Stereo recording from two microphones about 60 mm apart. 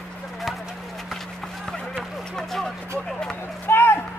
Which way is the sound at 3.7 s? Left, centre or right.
Left.